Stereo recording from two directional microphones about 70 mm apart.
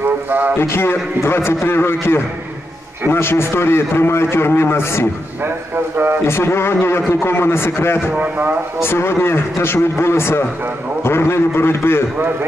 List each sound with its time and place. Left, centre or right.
0.6 s a man's voice: left
6.2 s a man's voice: left
8.2 s speech: right
8.8 s a man's voice: left